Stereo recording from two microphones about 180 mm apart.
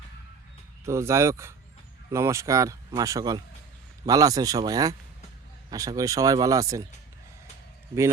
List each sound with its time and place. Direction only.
0.9 s speech: 15° right (ahead or behind)